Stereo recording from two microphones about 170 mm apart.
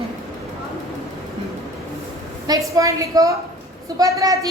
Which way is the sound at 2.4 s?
20° right (ahead or behind).